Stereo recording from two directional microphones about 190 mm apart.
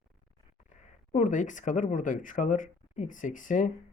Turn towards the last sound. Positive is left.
turn(degrees=40)  # may be behind; listen again after turning